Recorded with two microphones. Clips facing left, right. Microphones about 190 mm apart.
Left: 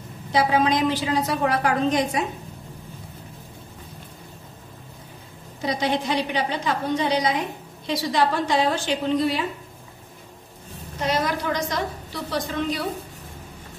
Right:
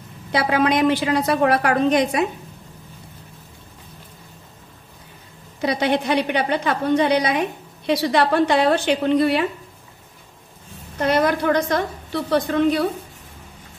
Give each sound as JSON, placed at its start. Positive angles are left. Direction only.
{"t": 0.3, "sound": "a woman's voice", "side_deg": -65}
{"t": 5.6, "sound": "a woman's voice", "side_deg": -65}
{"t": 11.0, "sound": "a woman's voice", "side_deg": -60}